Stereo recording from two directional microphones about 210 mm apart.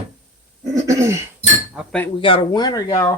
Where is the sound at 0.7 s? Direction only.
15° right (ahead or behind).